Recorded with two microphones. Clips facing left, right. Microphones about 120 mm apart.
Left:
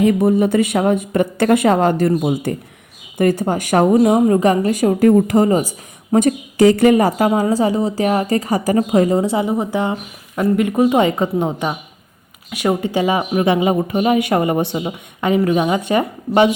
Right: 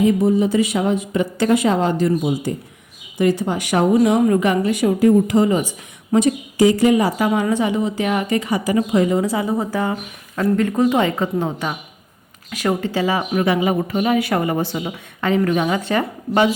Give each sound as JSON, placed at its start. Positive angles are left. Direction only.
{"t": 0.0, "sound": "speech", "side_deg": 60}
{"t": 7.3, "sound": "a woman's voice", "side_deg": 35}